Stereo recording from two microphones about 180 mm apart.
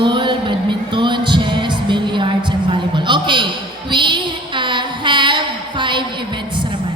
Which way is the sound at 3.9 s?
25° right (ahead or behind).